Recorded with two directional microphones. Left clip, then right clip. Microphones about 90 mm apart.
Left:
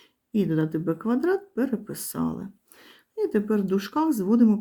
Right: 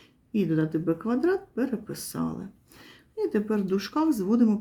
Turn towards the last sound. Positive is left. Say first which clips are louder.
# left 2 dB
turn(degrees=25)  # may be behind; listen again after turning